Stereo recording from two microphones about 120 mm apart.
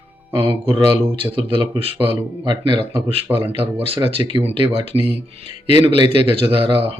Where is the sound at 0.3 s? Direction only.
50° right (ahead or behind).